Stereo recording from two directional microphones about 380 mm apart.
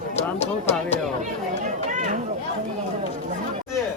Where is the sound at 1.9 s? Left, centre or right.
Centre.